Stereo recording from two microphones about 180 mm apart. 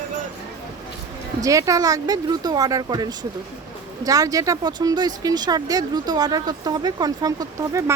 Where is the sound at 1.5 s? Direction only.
20° right (ahead or behind).